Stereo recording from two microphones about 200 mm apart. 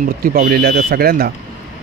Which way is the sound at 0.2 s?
45° right (ahead or behind).